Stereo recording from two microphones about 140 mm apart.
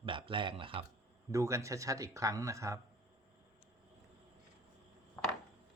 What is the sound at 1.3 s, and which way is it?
Speech, 20° right (ahead or behind).